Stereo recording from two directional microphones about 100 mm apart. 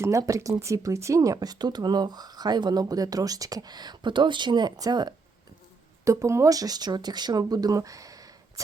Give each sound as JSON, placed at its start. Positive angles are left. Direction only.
{"t": 0.0, "sound": "speech", "side_deg": -35}
{"t": 6.1, "sound": "speech", "side_deg": -30}